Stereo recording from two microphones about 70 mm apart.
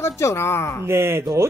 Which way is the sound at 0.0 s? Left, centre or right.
Left.